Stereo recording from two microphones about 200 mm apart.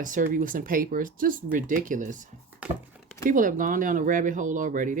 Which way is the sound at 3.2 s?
40° right (ahead or behind).